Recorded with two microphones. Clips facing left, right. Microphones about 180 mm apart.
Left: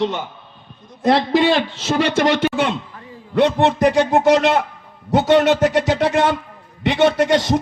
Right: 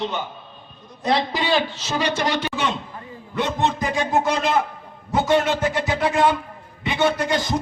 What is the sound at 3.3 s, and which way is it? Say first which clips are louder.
A man's voice: left 8 dB; 70° left (ahead or behind).